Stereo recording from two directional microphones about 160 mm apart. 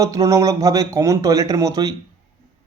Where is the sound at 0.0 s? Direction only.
20° right (ahead or behind).